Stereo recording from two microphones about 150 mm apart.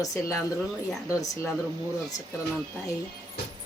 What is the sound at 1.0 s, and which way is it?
Speech, 20° left (ahead or behind).